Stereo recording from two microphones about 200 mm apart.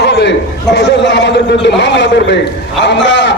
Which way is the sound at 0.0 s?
60° left (ahead or behind).